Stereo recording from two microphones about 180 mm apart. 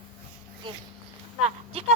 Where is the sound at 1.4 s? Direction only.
35° right (ahead or behind).